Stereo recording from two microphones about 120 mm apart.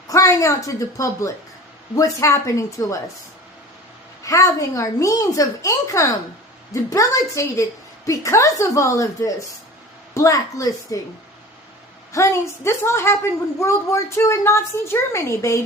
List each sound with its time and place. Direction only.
0.1 s a woman's voice: 25° left (ahead or behind)
4.2 s a woman's voice: 25° left (ahead or behind)
12.1 s a woman's voice: 25° left (ahead or behind)